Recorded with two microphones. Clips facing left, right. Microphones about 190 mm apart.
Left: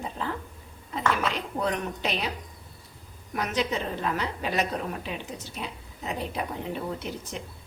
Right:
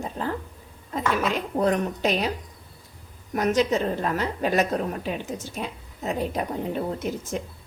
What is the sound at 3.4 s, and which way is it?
A woman's voice, 45° right (ahead or behind).